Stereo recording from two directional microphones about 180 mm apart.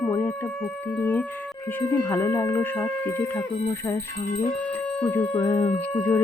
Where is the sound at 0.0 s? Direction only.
10° left (ahead or behind).